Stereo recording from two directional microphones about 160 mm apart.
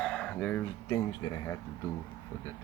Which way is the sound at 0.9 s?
20° left (ahead or behind).